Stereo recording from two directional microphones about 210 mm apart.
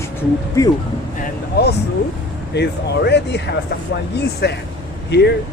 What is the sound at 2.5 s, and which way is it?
Speech, 55° left (ahead or behind).